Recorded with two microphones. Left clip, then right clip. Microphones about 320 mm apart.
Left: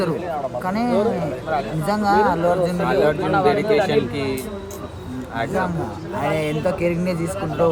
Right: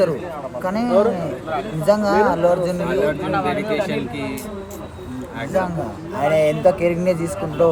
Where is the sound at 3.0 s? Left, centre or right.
Centre.